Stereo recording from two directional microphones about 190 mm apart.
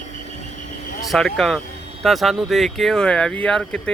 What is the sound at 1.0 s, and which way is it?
Speech, centre (ahead or behind).